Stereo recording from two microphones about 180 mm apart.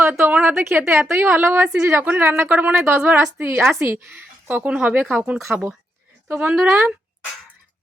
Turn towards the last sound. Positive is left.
turn(degrees=-10)  # may be behind; listen again after turning